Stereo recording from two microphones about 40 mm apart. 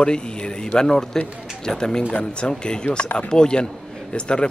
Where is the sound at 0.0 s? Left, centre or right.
Left.